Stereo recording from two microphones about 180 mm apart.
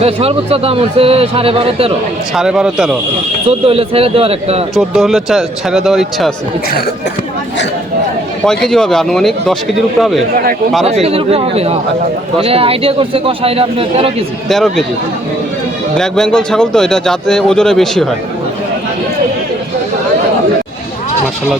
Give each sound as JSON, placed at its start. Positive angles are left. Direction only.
{"t": 0.0, "sound": "speech", "side_deg": -35}
{"t": 2.3, "sound": "speech", "side_deg": -5}
{"t": 3.5, "sound": "speech", "side_deg": -30}
{"t": 4.7, "sound": "speech", "side_deg": 0}
{"t": 8.4, "sound": "speech", "side_deg": 5}
{"t": 10.8, "sound": "speech", "side_deg": -35}
{"t": 14.4, "sound": "speech", "side_deg": 0}
{"t": 16.0, "sound": "speech", "side_deg": 5}